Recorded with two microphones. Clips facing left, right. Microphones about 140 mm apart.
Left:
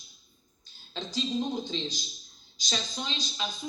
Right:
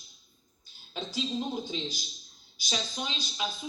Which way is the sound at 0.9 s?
10° right (ahead or behind).